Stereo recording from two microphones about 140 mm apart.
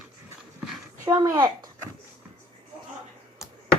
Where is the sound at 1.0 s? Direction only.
20° right (ahead or behind).